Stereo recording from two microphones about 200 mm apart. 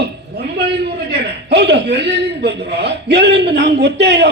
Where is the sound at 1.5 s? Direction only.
55° right (ahead or behind).